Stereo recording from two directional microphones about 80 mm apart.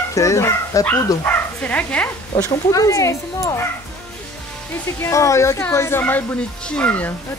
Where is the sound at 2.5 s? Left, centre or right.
Left.